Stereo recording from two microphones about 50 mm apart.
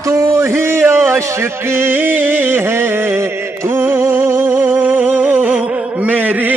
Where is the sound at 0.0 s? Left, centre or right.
Right.